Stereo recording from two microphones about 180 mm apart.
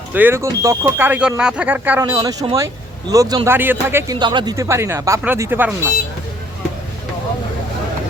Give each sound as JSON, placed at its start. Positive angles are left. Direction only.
{"t": 0.1, "sound": "speech", "side_deg": -10}
{"t": 2.1, "sound": "speech", "side_deg": -25}
{"t": 4.2, "sound": "speech", "side_deg": -25}